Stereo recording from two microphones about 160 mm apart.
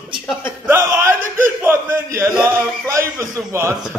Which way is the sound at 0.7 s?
15° right (ahead or behind).